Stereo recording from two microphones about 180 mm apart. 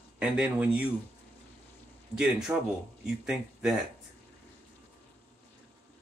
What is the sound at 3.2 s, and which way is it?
Speech, 5° right (ahead or behind).